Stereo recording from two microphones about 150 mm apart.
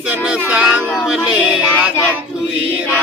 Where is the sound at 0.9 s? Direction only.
5° right (ahead or behind).